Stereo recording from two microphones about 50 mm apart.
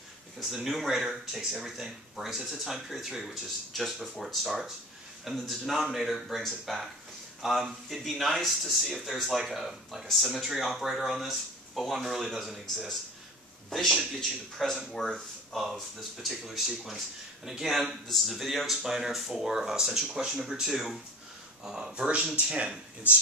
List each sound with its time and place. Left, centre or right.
0.4 s speech: centre
3.7 s a man's voice: centre
15.6 s speech: centre
21.9 s speech: right